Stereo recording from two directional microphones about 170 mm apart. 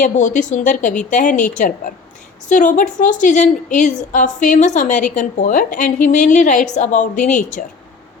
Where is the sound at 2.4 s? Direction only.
45° left (ahead or behind).